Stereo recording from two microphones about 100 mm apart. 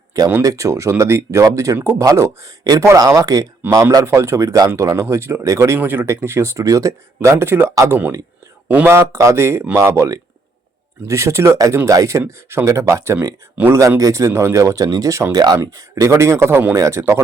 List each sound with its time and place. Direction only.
0.4 s speech: 30° right (ahead or behind)
3.6 s speech: 20° right (ahead or behind)
8.9 s speech: 30° right (ahead or behind)
13.6 s speech: 15° right (ahead or behind)
14.0 s speech: 30° right (ahead or behind)